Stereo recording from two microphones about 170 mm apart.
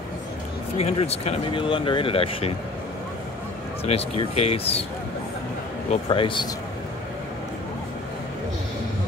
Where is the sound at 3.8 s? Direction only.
35° left (ahead or behind).